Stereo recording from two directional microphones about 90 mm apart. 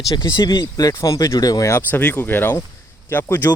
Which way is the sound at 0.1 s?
45° left (ahead or behind).